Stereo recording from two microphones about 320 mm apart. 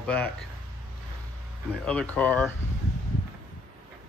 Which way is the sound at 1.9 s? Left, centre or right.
Centre.